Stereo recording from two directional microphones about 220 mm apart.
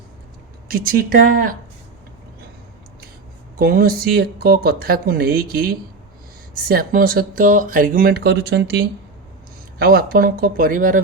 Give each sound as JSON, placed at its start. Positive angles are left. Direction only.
{"t": 0.7, "sound": "speech", "side_deg": -40}
{"t": 3.6, "sound": "speech", "side_deg": -45}